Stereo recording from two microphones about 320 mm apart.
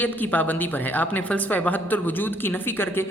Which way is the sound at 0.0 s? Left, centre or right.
Centre.